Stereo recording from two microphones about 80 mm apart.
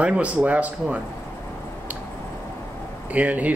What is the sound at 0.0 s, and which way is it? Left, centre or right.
Speech, centre.